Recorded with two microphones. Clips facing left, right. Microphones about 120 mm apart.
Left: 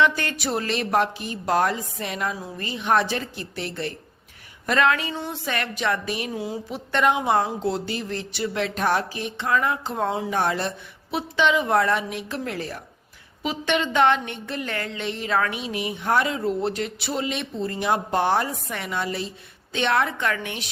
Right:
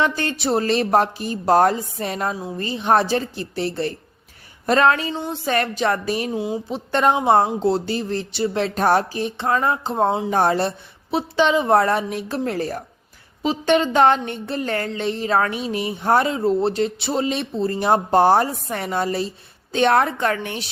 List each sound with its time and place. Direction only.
0.0 s speech: 30° right (ahead or behind)
6.3 s speech: 25° right (ahead or behind)